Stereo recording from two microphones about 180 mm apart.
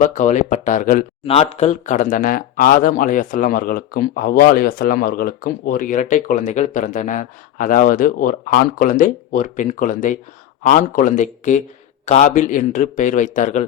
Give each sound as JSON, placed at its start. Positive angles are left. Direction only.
{"t": 0.0, "sound": "speech", "side_deg": 45}
{"t": 1.2, "sound": "speech", "side_deg": 35}